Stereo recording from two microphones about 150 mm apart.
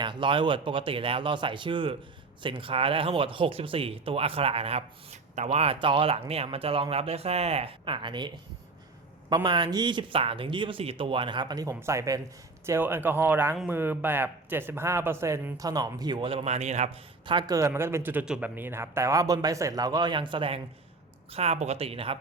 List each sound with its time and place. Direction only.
0.0 s speech: 30° right (ahead or behind)
9.3 s speech: 30° right (ahead or behind); by 17.0 s 50° right (ahead or behind)
17.2 s speech: 30° right (ahead or behind)